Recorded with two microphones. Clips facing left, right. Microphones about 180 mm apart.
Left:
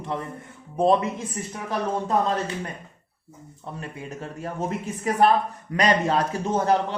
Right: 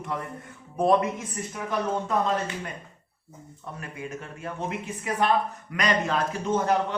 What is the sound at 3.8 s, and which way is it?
A man's voice, 35° left (ahead or behind).